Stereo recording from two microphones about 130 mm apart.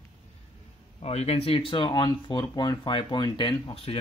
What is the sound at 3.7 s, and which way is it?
Speech, 50° left (ahead or behind).